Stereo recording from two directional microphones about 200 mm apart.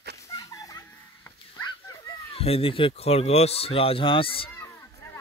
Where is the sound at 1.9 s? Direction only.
20° left (ahead or behind).